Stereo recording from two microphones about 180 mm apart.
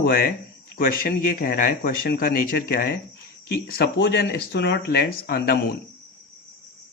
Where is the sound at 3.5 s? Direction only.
65° left (ahead or behind).